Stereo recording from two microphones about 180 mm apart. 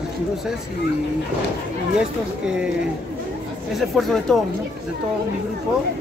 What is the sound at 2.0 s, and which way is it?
Speech, 5° right (ahead or behind).